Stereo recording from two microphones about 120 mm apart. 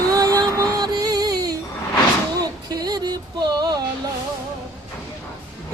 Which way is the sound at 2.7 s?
35° right (ahead or behind).